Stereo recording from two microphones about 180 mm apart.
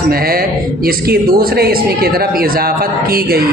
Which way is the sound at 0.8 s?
55° right (ahead or behind).